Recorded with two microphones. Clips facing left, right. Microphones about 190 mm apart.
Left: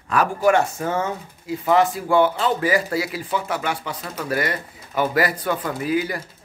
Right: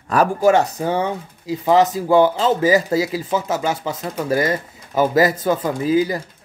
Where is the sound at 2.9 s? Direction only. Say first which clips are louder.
Right 5 dB; 20° right (ahead or behind).